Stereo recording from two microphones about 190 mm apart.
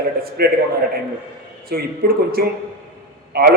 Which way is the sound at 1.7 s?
55° right (ahead or behind).